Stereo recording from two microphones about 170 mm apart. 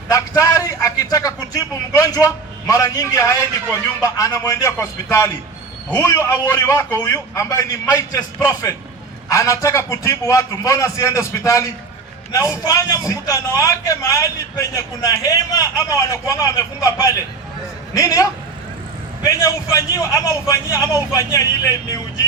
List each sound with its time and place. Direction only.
0.1 s a sound: 20° left (ahead or behind)
4.0 s a man's voice: 20° left (ahead or behind)
9.3 s a man's voice: 20° left (ahead or behind)